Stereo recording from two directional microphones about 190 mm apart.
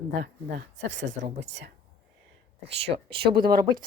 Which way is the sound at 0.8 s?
70° right (ahead or behind).